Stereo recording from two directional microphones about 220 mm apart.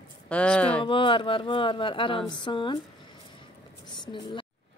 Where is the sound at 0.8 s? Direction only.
20° left (ahead or behind).